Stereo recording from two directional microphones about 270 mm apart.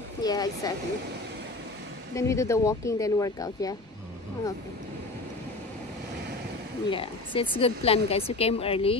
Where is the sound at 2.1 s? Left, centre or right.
Centre.